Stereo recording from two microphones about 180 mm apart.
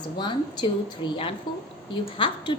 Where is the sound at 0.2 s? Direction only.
25° left (ahead or behind).